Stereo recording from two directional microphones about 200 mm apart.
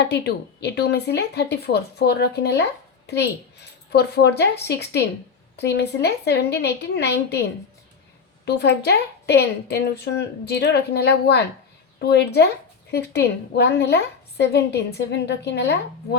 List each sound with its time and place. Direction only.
0.0 s a woman's voice: 55° left (ahead or behind)
3.9 s a woman's voice: 55° left (ahead or behind)
8.4 s a woman's voice: 55° left (ahead or behind)